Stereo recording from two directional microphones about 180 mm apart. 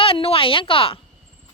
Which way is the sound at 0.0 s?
30° left (ahead or behind).